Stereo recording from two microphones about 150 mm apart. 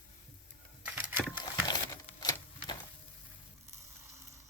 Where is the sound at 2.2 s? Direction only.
30° left (ahead or behind).